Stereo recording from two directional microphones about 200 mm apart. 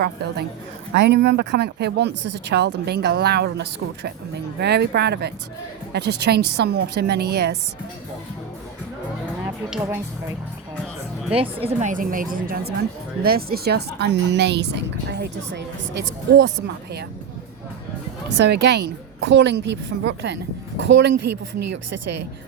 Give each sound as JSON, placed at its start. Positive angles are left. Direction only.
{"t": 0.0, "sound": "a woman's voice", "side_deg": -50}
{"t": 9.6, "sound": "speech", "side_deg": -5}
{"t": 11.3, "sound": "a woman's voice", "side_deg": -30}
{"t": 18.3, "sound": "a woman's voice", "side_deg": -60}